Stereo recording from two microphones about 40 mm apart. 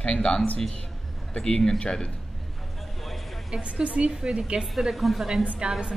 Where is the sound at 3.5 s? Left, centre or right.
Right.